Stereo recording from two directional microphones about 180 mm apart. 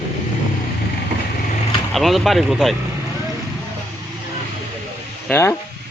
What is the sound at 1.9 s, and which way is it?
Speech, centre (ahead or behind).